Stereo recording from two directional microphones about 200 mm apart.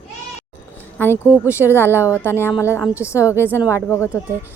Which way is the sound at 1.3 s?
10° right (ahead or behind).